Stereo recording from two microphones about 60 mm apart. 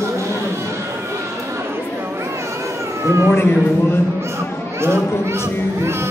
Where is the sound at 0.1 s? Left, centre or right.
Right.